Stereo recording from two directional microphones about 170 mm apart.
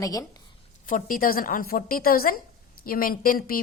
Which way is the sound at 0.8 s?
50° left (ahead or behind).